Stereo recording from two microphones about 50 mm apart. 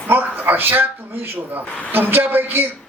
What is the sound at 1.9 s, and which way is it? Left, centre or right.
Speech, right.